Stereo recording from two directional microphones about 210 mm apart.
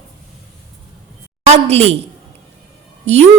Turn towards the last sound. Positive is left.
turn(degrees=-30)  # may be behind; listen again after turning